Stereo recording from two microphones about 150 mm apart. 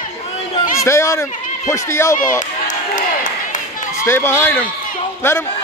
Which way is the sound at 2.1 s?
60° left (ahead or behind).